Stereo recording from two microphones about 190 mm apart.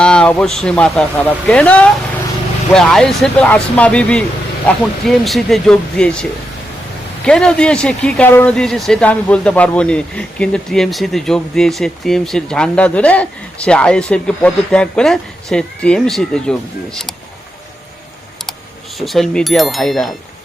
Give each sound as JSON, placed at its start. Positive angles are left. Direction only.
{"t": 0.0, "sound": "speech", "side_deg": 5}
{"t": 7.3, "sound": "speech", "side_deg": 5}
{"t": 18.9, "sound": "speech", "side_deg": 0}